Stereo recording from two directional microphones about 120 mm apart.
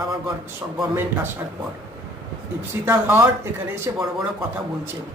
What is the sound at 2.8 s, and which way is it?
A man's voice, 15° right (ahead or behind).